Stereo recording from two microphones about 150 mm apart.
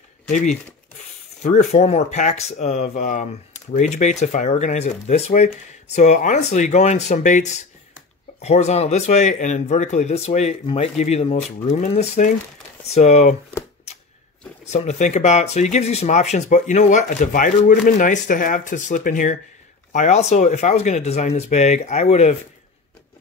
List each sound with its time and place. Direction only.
1.4 s speech: 50° left (ahead or behind)
14.7 s speech: 50° left (ahead or behind)